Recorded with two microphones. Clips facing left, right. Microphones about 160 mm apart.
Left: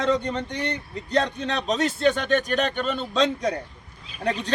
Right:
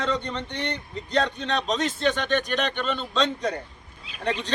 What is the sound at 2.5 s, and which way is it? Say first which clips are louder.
Speech: left 2 dB; 40° left (ahead or behind).